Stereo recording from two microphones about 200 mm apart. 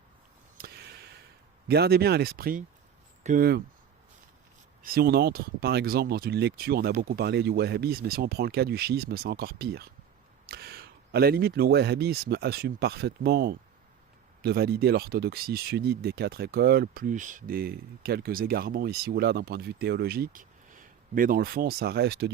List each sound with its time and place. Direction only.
1.6 s speech: 55° right (ahead or behind)
4.8 s speech: 50° right (ahead or behind)